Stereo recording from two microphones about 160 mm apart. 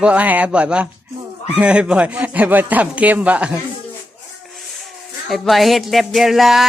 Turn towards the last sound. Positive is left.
turn(degrees=0)  # may be behind; listen again after turning